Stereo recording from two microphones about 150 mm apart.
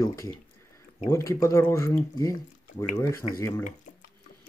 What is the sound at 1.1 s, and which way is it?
Speech, 20° left (ahead or behind).